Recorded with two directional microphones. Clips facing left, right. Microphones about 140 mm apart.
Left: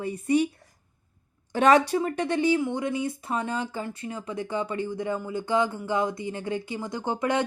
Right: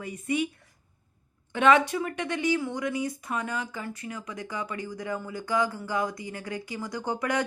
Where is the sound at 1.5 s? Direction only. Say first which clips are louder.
Left 2 dB; 35° left (ahead or behind).